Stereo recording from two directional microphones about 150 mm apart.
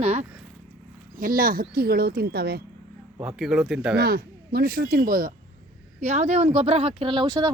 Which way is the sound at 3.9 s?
90° right.